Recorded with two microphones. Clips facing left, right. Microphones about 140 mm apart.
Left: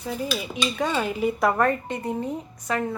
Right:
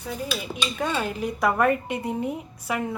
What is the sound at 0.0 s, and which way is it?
A woman's voice, centre (ahead or behind).